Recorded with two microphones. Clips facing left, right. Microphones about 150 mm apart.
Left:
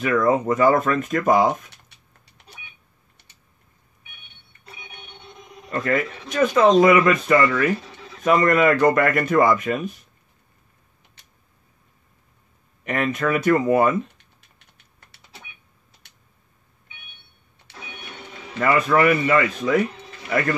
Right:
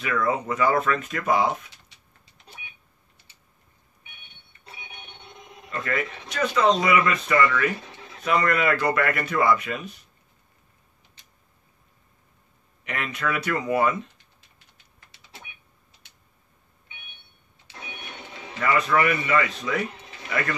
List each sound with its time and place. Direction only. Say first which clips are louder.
0.0 s speech: left 6 dB; 45° left (ahead or behind)
5.7 s speech: left 6 dB; 45° left (ahead or behind)
12.8 s speech: left 7 dB; 45° left (ahead or behind)
18.6 s speech: left 4 dB; 45° left (ahead or behind)